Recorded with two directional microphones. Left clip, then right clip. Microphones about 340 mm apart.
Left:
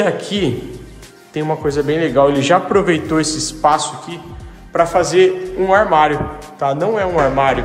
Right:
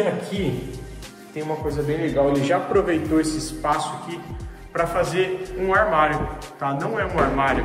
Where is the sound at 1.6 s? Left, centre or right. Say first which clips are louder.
Left 8 dB; left; by 7.5 s centre.